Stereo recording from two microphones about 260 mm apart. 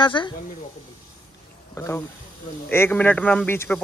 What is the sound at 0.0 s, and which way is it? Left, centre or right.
Speech, centre.